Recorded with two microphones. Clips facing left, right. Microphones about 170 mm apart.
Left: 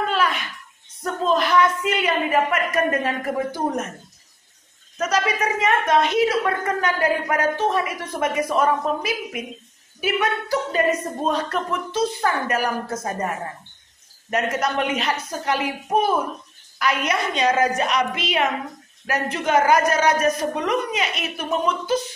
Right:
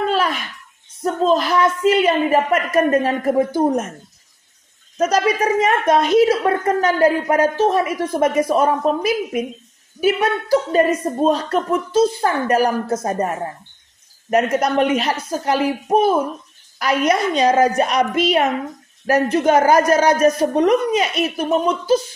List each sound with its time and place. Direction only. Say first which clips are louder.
0.1 s a sound: right 3 dB; 35° right (ahead or behind)
1.0 s a woman's voice: right 4 dB; 35° right (ahead or behind)
5.0 s a woman's voice: right 5 dB; 45° right (ahead or behind)
14.3 s a woman's voice: right 6 dB; 40° right (ahead or behind)